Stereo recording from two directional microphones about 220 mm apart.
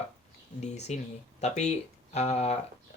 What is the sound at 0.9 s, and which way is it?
Speech, 30° left (ahead or behind).